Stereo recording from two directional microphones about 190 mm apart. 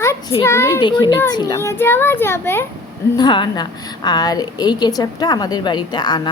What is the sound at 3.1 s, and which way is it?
A woman's voice, 25° left (ahead or behind).